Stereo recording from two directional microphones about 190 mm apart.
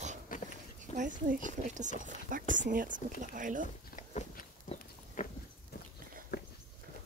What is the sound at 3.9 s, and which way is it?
Biting, 40° left (ahead or behind).